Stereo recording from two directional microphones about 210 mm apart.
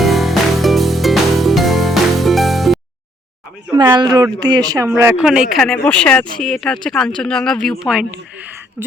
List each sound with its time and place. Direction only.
0.0 s music: centre (ahead or behind)
3.9 s speech: 20° right (ahead or behind)